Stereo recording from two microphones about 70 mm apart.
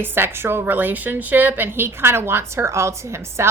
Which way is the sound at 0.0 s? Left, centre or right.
Right.